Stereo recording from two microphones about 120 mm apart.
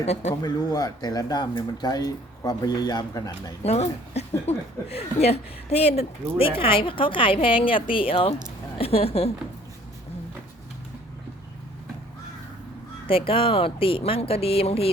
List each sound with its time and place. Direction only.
0.0 s speech: 70° left (ahead or behind)
0.4 s speech: 35° left (ahead or behind)
3.6 s speech: 60° left (ahead or behind)
13.1 s speech: 50° left (ahead or behind)